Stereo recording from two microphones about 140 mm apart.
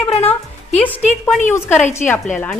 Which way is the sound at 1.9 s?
15° left (ahead or behind).